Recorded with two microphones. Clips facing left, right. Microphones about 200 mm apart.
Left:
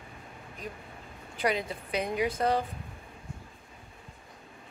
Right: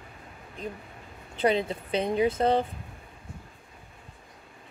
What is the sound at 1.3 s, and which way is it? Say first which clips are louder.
A woman's voice: right 5 dB; 25° right (ahead or behind).